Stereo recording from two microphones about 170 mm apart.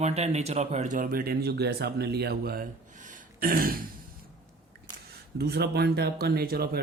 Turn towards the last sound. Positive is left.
turn(degrees=-60)  # may be behind; listen again after turning